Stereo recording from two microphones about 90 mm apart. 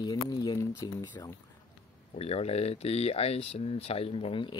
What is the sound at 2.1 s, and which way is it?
Speech, 90° left.